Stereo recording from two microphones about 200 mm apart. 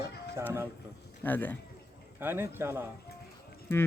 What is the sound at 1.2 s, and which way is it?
Speech, 10° left (ahead or behind).